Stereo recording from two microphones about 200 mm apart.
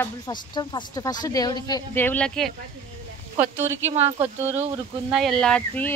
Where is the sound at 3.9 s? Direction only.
30° right (ahead or behind).